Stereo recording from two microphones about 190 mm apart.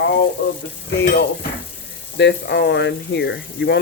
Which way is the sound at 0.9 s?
60° left (ahead or behind).